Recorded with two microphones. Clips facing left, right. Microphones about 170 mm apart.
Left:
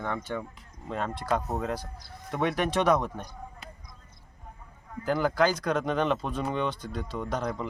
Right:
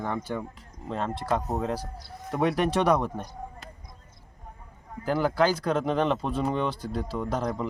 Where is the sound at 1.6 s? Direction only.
30° right (ahead or behind).